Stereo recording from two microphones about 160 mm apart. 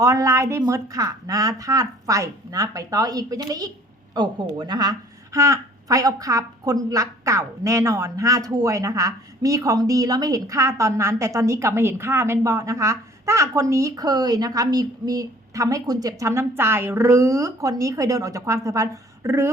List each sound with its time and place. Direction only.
0.0 s a woman's voice: 20° right (ahead or behind)